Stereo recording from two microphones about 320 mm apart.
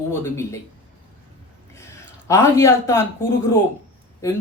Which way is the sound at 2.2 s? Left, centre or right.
Centre.